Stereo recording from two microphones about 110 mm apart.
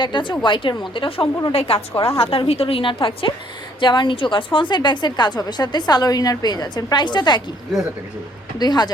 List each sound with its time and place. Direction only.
0.0 s a woman's voice: 45° left (ahead or behind)
8.5 s a woman's voice: 40° left (ahead or behind)